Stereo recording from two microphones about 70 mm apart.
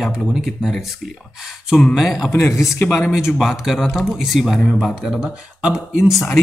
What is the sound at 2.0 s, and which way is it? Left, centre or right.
Speech, centre.